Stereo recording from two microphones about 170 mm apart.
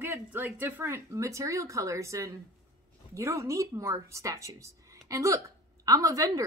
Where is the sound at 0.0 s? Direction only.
10° right (ahead or behind).